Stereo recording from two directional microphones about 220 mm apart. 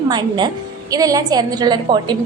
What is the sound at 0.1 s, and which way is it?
A woman's voice, 20° right (ahead or behind).